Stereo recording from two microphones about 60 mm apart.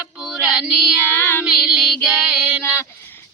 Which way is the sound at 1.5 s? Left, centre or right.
Centre.